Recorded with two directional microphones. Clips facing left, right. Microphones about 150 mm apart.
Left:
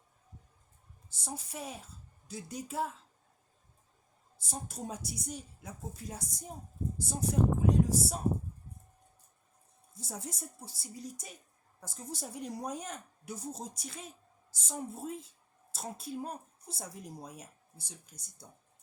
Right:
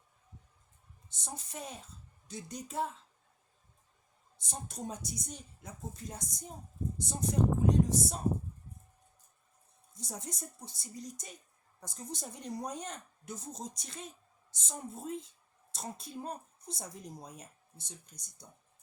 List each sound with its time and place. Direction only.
1.1 s a woman's voice: 10° left (ahead or behind)
4.4 s speech: 5° left (ahead or behind)
9.9 s speech: 5° left (ahead or behind)